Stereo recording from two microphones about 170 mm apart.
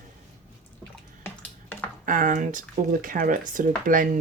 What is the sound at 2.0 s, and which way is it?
Speech, 50° right (ahead or behind).